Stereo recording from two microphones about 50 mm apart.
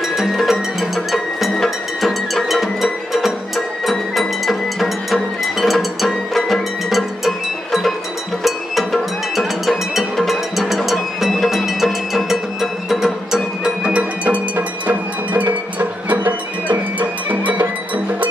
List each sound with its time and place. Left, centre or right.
0.4 s music: centre
13.8 s music: right